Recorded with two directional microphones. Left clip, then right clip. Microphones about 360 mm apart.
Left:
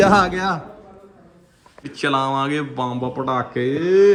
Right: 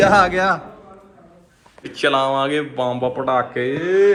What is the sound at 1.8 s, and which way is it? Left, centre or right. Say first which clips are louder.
Speech: right 3 dB; centre.